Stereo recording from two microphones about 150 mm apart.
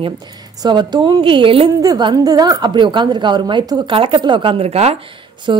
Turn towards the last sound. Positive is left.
turn(degrees=-30)  # may be behind; listen again after turning